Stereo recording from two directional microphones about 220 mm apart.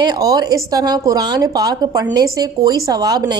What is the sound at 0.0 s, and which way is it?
A woman's voice, 15° right (ahead or behind).